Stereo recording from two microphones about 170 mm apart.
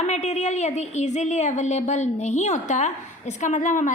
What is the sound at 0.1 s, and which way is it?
A woman's voice, 40° left (ahead or behind).